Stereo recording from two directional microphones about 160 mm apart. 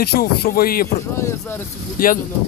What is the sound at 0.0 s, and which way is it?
Speech, 75° left (ahead or behind).